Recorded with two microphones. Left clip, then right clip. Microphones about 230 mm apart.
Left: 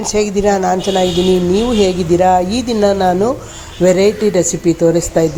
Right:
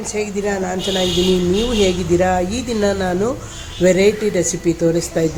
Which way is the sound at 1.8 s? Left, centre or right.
Centre.